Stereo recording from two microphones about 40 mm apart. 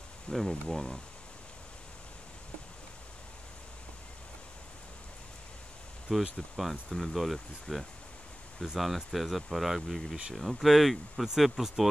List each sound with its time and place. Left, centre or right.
0.3 s speech: centre
6.1 s speech: centre
6.5 s speech: centre
8.7 s speech: centre